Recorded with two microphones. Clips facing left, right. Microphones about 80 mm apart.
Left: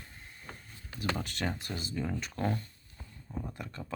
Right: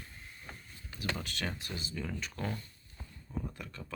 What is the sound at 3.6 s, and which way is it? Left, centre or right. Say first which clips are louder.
Speech: left 3 dB; left.